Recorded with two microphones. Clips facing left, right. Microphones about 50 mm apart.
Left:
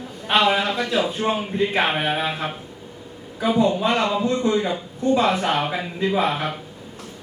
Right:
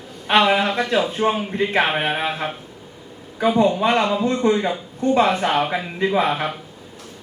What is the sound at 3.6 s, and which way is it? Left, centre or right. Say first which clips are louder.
Speech: right 1 dB; centre.